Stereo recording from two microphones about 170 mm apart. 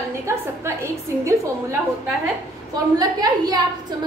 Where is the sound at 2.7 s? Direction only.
20° right (ahead or behind).